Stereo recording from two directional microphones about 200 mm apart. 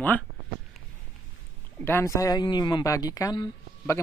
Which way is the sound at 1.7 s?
10° left (ahead or behind).